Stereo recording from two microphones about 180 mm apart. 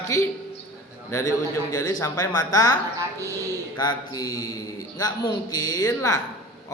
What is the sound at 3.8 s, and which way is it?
A man's voice, 20° left (ahead or behind).